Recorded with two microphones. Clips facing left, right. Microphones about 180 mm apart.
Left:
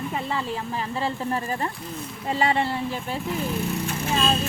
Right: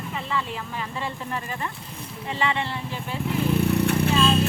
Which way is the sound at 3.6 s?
65° right (ahead or behind).